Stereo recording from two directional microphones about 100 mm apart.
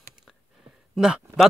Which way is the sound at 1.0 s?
5° right (ahead or behind).